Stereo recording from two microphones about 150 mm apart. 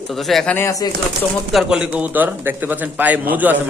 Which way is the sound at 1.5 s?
5° right (ahead or behind).